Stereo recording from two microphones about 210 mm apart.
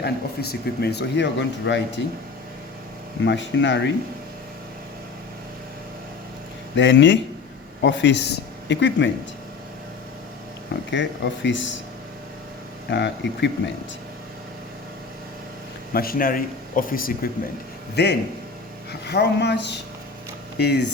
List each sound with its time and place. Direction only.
0.0 s speech: 50° left (ahead or behind)
3.2 s speech: 60° left (ahead or behind)
6.7 s speech: 60° left (ahead or behind)
10.9 s speech: 60° left (ahead or behind)
12.9 s speech: 55° left (ahead or behind)
15.9 s speech: 45° left (ahead or behind)